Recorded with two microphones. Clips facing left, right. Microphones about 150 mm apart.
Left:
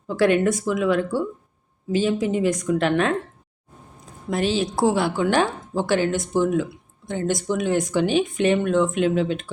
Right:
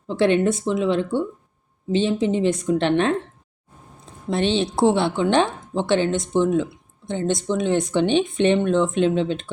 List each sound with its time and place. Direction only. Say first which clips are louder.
0.1 s speech: even; 25° right (ahead or behind)
4.0 s a sound: right 1 dB; 25° right (ahead or behind)
4.8 s speech: right 2 dB; 25° right (ahead or behind)